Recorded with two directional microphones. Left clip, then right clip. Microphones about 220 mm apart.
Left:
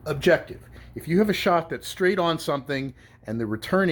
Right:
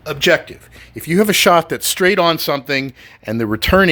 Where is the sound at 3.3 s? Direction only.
45° right (ahead or behind).